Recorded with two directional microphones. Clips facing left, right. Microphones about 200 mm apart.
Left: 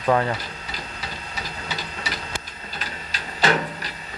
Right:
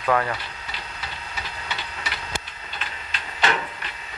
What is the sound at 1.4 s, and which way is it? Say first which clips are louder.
Printer: left 3 dB; 40° left (ahead or behind).